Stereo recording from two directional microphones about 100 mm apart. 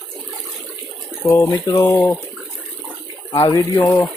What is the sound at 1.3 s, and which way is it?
Speech, 30° left (ahead or behind).